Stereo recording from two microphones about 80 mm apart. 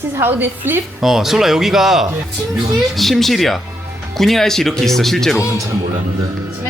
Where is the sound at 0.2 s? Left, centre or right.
Right.